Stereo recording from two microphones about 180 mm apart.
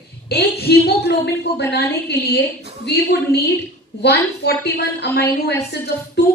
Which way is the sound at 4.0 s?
70° left (ahead or behind).